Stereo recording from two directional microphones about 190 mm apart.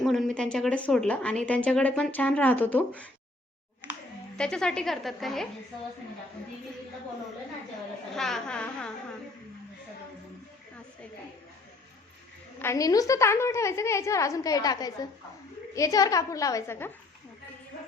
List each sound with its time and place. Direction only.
0.0 s a woman's voice: centre (ahead or behind)
4.4 s a woman's voice: 5° left (ahead or behind)
8.1 s a woman's voice: centre (ahead or behind)
12.5 s a woman's voice: 15° left (ahead or behind)